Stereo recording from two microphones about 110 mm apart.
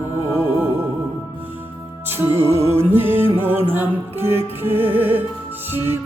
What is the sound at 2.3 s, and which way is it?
Music, 25° right (ahead or behind).